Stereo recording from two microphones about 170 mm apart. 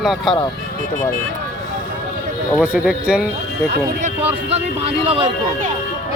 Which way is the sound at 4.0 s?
35° right (ahead or behind).